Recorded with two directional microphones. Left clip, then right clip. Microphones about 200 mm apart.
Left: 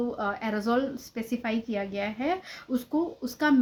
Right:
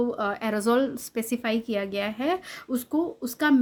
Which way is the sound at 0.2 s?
45° right (ahead or behind).